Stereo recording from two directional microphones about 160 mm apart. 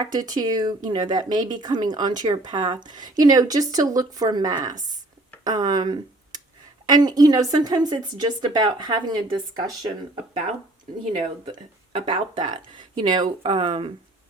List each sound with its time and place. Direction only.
0.0 s speech: 25° right (ahead or behind)
11.9 s speech: 30° right (ahead or behind)